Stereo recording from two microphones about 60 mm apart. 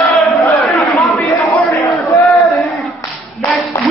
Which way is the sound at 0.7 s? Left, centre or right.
Left.